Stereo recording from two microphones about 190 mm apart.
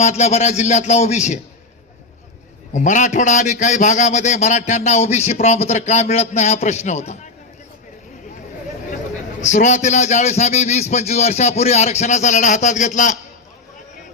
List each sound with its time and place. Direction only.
0.0 s a man's voice: 35° left (ahead or behind)
2.7 s a man's voice: 40° left (ahead or behind)
9.4 s a man's voice: 40° left (ahead or behind)